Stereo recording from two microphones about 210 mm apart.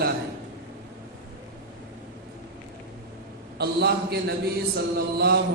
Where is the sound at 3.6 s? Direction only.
50° right (ahead or behind).